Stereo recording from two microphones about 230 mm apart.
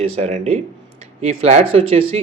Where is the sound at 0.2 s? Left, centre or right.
Right.